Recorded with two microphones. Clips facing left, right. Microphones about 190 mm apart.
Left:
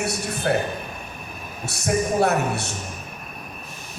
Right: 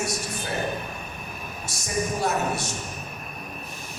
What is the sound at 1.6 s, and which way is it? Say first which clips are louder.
A man's voice: left 6 dB; 65° left (ahead or behind).